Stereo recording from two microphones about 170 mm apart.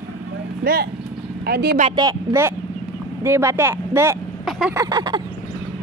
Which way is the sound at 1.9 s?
20° right (ahead or behind).